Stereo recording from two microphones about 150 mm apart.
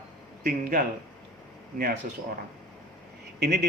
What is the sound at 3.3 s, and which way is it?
Speech, 90° right.